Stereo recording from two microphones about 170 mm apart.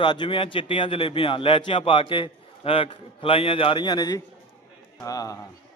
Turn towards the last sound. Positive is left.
turn(degrees=20)  # may be behind; listen again after turning